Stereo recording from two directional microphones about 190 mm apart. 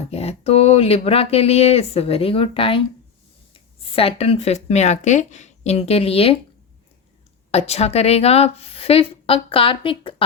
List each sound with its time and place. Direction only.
0.1 s a woman's voice: 30° left (ahead or behind)
7.5 s a woman's voice: 35° left (ahead or behind)